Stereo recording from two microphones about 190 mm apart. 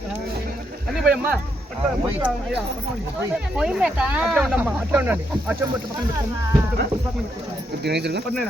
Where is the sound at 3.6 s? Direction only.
5° right (ahead or behind).